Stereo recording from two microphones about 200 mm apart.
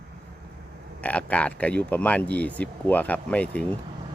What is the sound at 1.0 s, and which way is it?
Speech, 5° left (ahead or behind).